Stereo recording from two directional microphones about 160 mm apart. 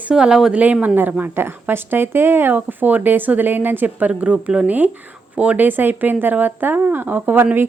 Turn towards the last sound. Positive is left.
turn(degrees=-10)  # may be behind; listen again after turning